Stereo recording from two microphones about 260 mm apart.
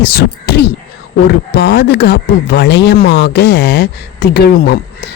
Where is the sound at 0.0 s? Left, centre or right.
Left.